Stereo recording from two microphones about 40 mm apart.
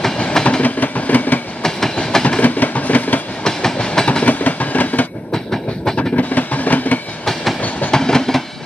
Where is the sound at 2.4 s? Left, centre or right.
Left.